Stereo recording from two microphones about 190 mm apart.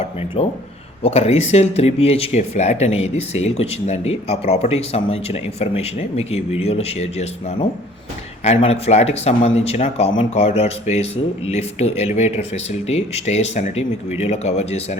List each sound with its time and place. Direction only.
0.0 s speech: 30° left (ahead or behind)